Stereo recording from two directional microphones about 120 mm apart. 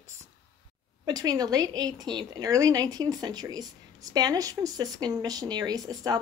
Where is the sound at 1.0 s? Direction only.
30° right (ahead or behind).